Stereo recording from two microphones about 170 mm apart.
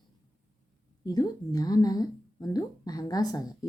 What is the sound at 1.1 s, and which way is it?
Speech, 20° left (ahead or behind).